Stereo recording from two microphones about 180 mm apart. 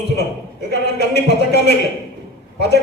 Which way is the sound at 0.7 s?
65° left (ahead or behind).